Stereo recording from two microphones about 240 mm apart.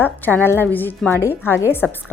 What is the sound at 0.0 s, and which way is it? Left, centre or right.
Speech, centre.